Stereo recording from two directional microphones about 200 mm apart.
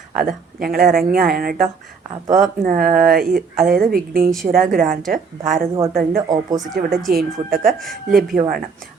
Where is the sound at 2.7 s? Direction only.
45° right (ahead or behind).